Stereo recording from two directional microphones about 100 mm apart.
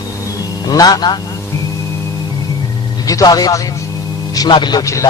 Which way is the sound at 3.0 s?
40° left (ahead or behind).